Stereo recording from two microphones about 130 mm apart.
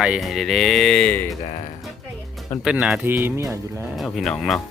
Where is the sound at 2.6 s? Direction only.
5° right (ahead or behind).